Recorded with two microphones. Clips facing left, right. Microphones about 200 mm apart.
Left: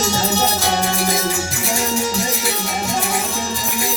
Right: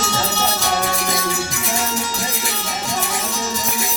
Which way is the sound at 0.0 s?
40° left (ahead or behind).